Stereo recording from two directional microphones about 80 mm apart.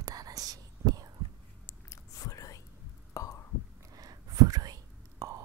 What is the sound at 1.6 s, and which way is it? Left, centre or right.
Whispering, left.